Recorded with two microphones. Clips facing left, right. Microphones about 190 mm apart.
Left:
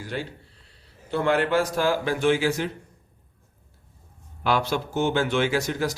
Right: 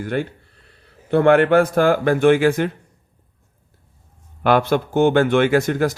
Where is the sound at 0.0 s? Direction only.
55° right (ahead or behind).